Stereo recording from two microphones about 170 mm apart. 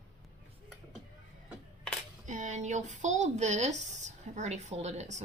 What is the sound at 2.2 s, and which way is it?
Speech, 50° right (ahead or behind).